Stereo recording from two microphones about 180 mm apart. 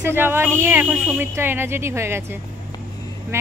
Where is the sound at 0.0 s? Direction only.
10° right (ahead or behind).